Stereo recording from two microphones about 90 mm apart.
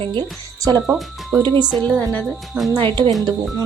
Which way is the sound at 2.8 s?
65° right (ahead or behind).